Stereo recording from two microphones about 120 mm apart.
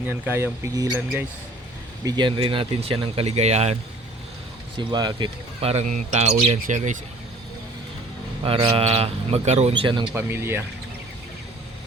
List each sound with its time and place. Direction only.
0.0 s speech: 15° right (ahead or behind)
2.0 s speech: 40° right (ahead or behind)
3.2 s speech: 65° right (ahead or behind)
4.8 s speech: 40° right (ahead or behind)
5.5 s speech: 60° right (ahead or behind); by 7.0 s 90° right
8.7 s speech: 55° right (ahead or behind)
9.7 s speech: 45° right (ahead or behind)
10.2 s speech: 20° right (ahead or behind)